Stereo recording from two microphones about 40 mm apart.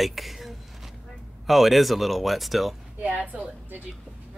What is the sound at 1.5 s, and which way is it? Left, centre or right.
Speech, centre.